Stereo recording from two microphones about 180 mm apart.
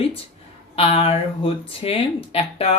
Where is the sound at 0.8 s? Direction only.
35° left (ahead or behind).